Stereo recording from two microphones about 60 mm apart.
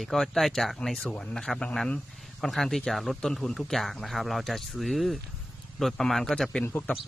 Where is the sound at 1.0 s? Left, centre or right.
Centre.